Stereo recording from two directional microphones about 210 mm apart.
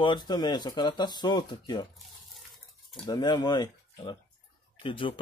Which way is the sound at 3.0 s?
20° left (ahead or behind).